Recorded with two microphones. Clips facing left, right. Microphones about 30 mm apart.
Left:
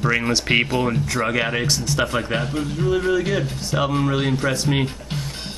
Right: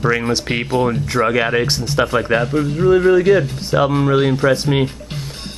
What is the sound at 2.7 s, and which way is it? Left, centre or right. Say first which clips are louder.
Speech: right 8 dB; right.